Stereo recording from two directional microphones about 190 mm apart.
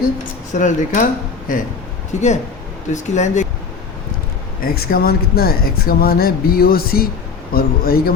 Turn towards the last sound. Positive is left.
turn(degrees=55)  # may be behind; listen again after turning